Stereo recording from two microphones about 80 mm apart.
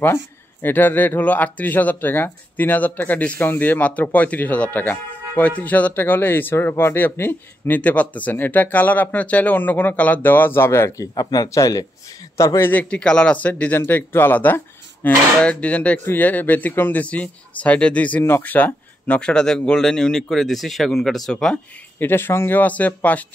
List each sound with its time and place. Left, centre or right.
0.0 s speech: left
11.1 s speech: left
12.5 s speech: left
12.9 s speech: centre
21.9 s speech: left